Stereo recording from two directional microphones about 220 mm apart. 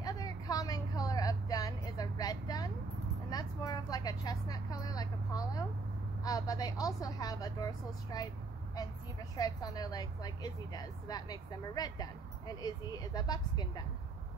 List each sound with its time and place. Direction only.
0.0 s vehicle: 15° left (ahead or behind)
9.4 s speech: 15° left (ahead or behind)